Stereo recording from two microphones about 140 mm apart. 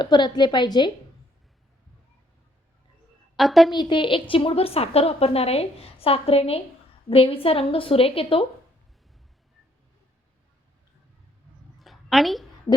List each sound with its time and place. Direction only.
0.0 s a woman's voice: 30° left (ahead or behind)
3.3 s a woman's voice: centre (ahead or behind)
3.8 s a woman's voice: 35° left (ahead or behind)
11.8 s a sound: centre (ahead or behind)